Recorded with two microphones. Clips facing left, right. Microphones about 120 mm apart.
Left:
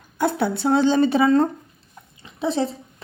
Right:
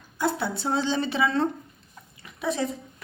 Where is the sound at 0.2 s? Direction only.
55° left (ahead or behind); by 1.5 s 40° left (ahead or behind).